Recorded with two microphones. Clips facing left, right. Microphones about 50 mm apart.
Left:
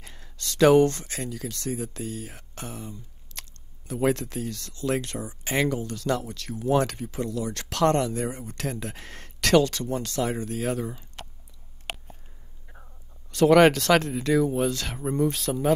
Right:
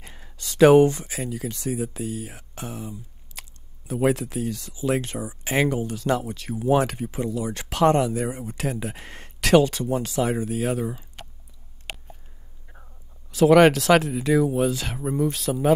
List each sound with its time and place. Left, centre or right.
0.0 s speech: centre
12.6 s speech: centre